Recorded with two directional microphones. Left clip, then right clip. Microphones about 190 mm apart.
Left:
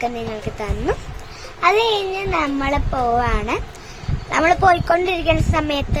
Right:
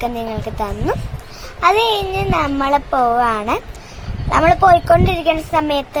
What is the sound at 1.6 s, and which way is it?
A woman's voice, 15° right (ahead or behind).